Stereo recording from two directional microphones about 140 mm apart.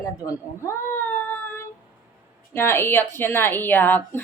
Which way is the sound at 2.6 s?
15° left (ahead or behind).